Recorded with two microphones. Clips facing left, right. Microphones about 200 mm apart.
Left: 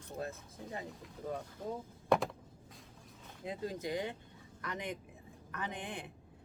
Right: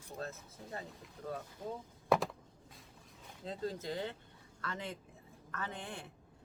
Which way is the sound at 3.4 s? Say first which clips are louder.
Left 1 dB; 15° left (ahead or behind).